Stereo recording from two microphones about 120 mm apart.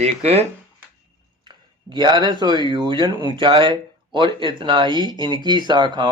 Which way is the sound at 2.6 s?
40° right (ahead or behind).